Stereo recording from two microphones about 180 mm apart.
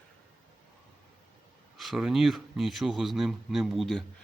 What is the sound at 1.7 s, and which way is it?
Speech, centre (ahead or behind).